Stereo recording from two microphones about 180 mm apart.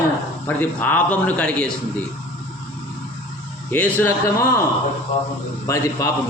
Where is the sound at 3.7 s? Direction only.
10° left (ahead or behind).